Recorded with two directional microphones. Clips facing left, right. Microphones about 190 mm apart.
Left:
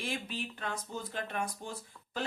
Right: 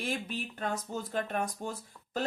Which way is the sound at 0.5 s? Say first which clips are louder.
Right 4 dB; 45° right (ahead or behind).